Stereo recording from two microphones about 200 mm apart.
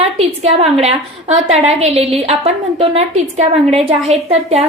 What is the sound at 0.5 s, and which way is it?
A woman's voice, 30° right (ahead or behind).